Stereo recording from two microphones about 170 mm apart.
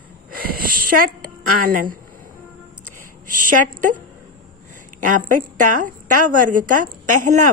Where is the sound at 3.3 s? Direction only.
50° right (ahead or behind).